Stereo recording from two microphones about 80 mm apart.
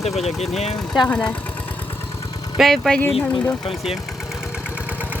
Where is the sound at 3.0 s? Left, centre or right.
Left.